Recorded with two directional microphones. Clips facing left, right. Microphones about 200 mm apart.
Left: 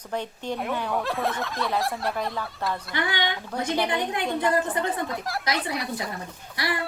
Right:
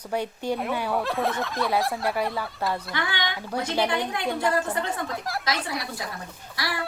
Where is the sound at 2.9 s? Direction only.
15° left (ahead or behind).